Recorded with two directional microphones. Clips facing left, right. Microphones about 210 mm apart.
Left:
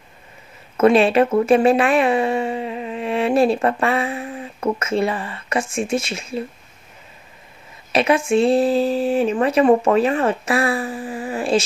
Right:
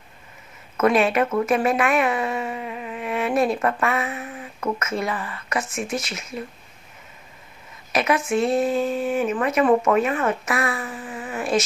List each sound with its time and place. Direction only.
0.7 s speech: 30° left (ahead or behind)
7.9 s speech: 30° left (ahead or behind)